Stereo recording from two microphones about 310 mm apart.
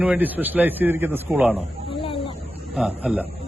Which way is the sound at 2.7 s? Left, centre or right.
Centre.